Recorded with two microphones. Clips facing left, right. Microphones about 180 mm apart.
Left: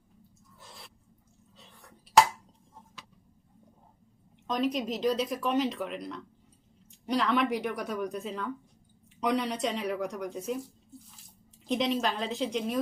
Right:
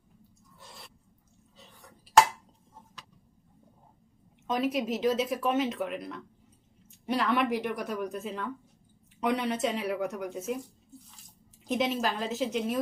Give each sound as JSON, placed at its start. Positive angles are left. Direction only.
{"t": 0.6, "sound": "a sound", "side_deg": 0}
{"t": 4.4, "sound": "speech", "side_deg": -5}
{"t": 11.6, "sound": "speech", "side_deg": -5}